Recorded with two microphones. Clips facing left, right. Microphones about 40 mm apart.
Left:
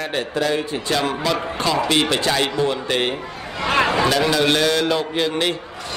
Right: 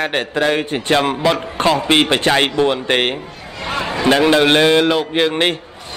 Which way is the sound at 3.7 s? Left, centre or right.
Left.